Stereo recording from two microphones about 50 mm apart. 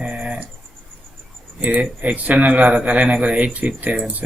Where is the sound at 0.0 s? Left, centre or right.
Right.